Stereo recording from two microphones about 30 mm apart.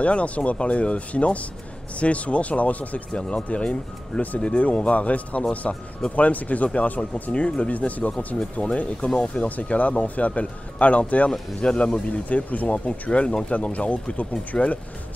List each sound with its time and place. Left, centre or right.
0.0 s speech: left
3.2 s speech: left
7.3 s speech: left
7.7 s speech: left
8.5 s speech: left
11.7 s speech: left
12.3 s speech: left
13.2 s speech: left